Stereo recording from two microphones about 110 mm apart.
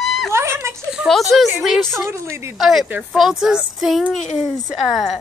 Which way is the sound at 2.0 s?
25° right (ahead or behind).